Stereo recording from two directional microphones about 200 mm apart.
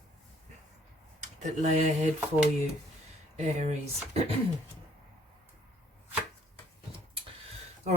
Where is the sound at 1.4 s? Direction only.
35° right (ahead or behind).